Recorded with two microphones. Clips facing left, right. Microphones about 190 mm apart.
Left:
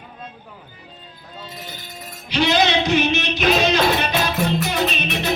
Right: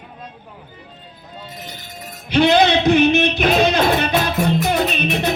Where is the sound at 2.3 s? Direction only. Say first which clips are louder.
Right 5 dB; 55° right (ahead or behind).